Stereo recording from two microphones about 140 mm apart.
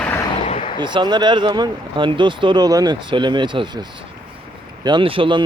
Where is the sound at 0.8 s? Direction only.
35° right (ahead or behind).